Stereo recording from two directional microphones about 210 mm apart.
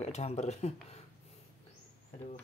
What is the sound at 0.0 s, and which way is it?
Speech, 30° left (ahead or behind).